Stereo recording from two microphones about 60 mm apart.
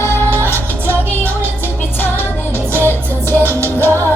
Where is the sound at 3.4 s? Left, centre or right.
Right.